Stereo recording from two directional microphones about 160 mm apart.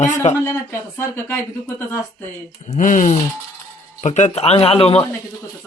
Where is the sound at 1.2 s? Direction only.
10° left (ahead or behind).